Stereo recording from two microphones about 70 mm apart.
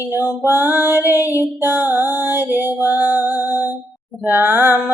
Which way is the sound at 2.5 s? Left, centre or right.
Right.